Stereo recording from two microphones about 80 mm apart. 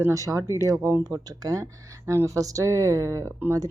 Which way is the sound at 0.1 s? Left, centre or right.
Right.